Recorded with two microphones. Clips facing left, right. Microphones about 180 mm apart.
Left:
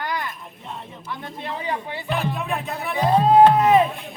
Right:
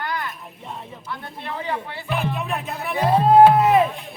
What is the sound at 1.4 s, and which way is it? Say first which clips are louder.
Speech: even; 15° left (ahead or behind).